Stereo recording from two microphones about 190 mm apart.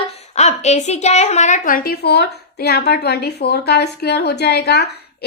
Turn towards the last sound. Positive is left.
turn(degrees=60)  # may be behind; listen again after turning